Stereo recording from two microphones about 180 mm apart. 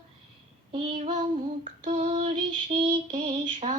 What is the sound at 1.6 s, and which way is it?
Female singing, 40° right (ahead or behind).